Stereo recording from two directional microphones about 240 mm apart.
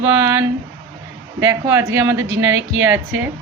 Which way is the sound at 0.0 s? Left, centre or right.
Centre.